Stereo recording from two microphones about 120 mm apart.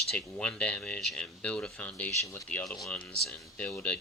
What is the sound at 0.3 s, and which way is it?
Speech, 10° left (ahead or behind).